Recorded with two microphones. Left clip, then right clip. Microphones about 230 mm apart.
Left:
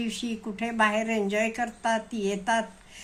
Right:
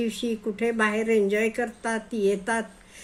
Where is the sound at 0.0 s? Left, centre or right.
Centre.